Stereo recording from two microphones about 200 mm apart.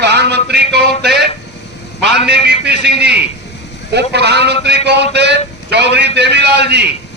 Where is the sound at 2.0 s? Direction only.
55° right (ahead or behind).